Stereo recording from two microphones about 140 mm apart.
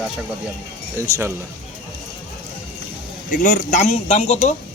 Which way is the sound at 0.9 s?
20° right (ahead or behind).